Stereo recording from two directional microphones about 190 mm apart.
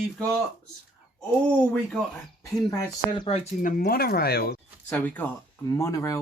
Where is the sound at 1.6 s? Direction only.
5° left (ahead or behind).